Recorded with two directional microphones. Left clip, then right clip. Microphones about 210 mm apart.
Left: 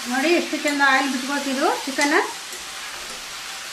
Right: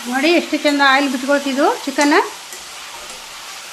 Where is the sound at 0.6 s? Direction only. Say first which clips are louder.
Right 6 dB; 45° right (ahead or behind).